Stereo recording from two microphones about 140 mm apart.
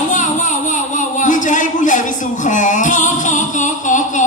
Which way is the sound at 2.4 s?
60° left (ahead or behind).